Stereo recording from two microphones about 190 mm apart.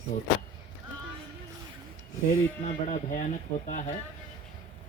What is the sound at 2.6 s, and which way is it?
Speech, 40° left (ahead or behind).